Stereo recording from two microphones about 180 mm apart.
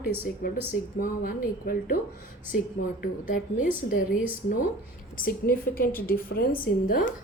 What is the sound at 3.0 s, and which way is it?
A woman's voice, 50° left (ahead or behind).